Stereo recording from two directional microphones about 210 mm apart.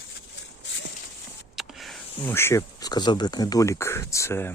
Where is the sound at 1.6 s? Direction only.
Centre (ahead or behind).